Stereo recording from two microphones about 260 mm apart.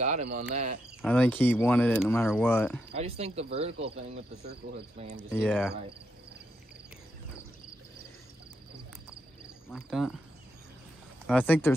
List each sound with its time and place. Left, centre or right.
0.0 s speech: right
1.0 s speech: centre
2.9 s speech: right
5.1 s speech: centre
9.7 s speech: centre
11.2 s speech: centre